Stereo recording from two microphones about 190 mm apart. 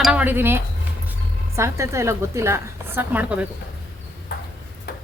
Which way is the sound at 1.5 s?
15° right (ahead or behind).